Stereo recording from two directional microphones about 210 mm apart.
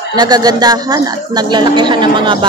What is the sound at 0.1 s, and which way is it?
Speech, 20° right (ahead or behind).